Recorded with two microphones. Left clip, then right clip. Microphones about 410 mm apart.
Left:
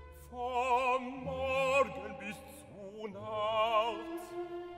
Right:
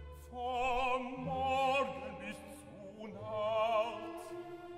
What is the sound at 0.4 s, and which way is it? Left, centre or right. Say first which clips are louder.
Opera: left 3 dB; left.